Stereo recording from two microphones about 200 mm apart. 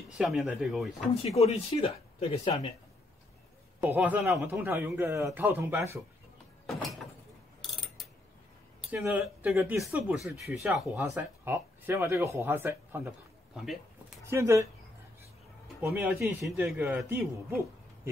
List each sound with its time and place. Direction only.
0.2 s speech: centre (ahead or behind)
1.4 s speech: 30° left (ahead or behind)
3.8 s speech: 10° right (ahead or behind)
6.6 s a sound: centre (ahead or behind)
7.6 s mechanisms: centre (ahead or behind)
8.9 s speech: 10° right (ahead or behind)
14.2 s speech: 15° right (ahead or behind)
15.8 s speech: 10° right (ahead or behind)